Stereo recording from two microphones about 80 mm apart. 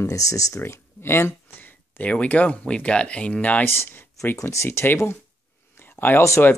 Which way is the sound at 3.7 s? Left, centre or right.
Left.